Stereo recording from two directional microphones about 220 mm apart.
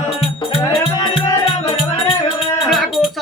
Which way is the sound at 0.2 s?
25° left (ahead or behind).